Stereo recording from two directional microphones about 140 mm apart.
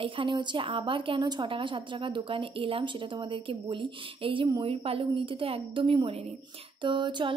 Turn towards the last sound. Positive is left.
turn(degrees=-35)  # may be behind; listen again after turning